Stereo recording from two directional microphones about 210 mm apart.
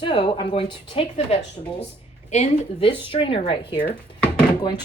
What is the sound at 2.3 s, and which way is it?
A woman's voice, 30° left (ahead or behind).